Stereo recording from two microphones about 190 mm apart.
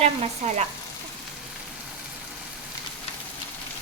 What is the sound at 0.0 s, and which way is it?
Frying, 35° right (ahead or behind).